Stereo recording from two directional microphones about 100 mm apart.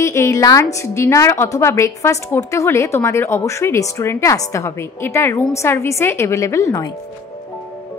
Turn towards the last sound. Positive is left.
turn(degrees=30)  # may be behind; listen again after turning